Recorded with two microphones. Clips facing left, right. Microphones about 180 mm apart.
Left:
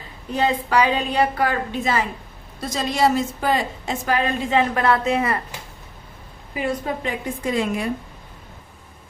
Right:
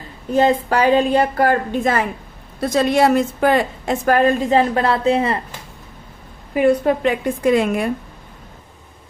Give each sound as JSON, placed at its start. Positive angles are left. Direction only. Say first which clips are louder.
{"t": 0.3, "sound": "a woman's voice", "louder": "right 6 dB", "side_deg": -45}
{"t": 6.5, "sound": "a woman's voice", "louder": "right 10 dB", "side_deg": -60}